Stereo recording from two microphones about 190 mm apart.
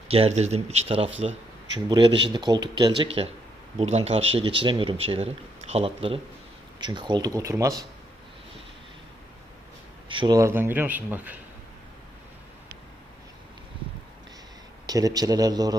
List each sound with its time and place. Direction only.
0.1 s speech: 35° right (ahead or behind)
3.8 s speech: 35° right (ahead or behind); by 7.9 s 15° right (ahead or behind)
10.1 s speech: 25° right (ahead or behind)
14.8 s speech: 20° right (ahead or behind)